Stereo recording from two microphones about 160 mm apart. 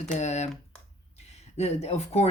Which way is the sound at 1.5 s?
45° left (ahead or behind).